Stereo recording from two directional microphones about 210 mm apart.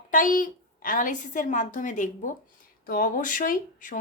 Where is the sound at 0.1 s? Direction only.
40° left (ahead or behind).